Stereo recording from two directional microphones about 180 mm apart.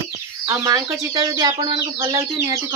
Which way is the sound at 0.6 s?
20° right (ahead or behind).